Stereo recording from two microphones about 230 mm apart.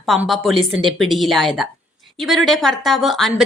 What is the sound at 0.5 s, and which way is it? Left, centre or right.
Speech, right.